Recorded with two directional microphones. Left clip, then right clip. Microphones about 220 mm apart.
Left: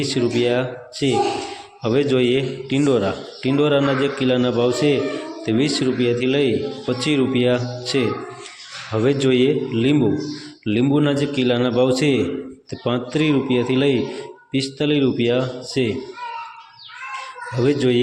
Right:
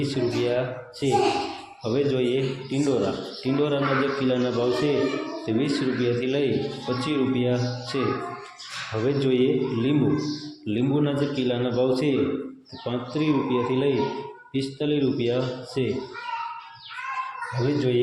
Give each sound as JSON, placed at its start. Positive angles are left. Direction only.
{"t": 0.0, "sound": "a man's voice", "side_deg": 30}
{"t": 9.0, "sound": "a man's voice", "side_deg": 30}
{"t": 17.6, "sound": "a man's voice", "side_deg": 30}